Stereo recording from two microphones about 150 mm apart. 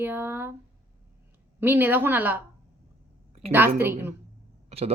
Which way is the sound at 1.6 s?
15° right (ahead or behind).